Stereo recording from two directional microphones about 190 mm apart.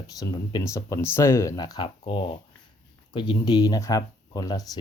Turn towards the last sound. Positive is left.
turn(degrees=20)  # may be behind; listen again after turning